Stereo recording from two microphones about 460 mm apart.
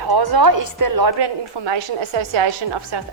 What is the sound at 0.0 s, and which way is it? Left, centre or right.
A woman's voice, right.